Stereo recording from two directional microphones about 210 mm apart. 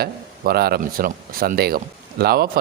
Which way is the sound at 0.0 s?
45° right (ahead or behind).